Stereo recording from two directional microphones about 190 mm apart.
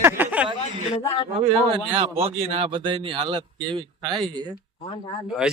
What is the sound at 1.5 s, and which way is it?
Speech, 30° right (ahead or behind).